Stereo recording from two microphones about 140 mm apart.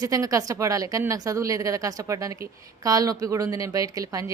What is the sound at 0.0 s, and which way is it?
A woman's voice, 25° right (ahead or behind).